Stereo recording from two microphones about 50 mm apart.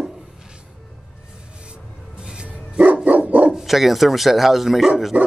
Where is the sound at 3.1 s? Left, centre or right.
Right.